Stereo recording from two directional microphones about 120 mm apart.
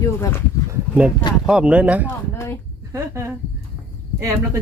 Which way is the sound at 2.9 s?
25° right (ahead or behind).